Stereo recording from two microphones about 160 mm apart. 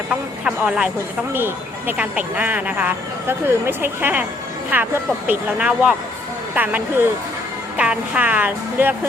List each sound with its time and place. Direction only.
0.4 s speech: 5° right (ahead or behind)